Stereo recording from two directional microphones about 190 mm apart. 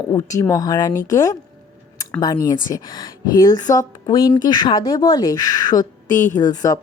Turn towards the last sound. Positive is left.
turn(degrees=20)  # may be behind; listen again after turning